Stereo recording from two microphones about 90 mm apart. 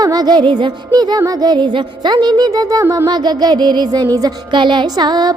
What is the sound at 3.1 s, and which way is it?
Music, 50° right (ahead or behind).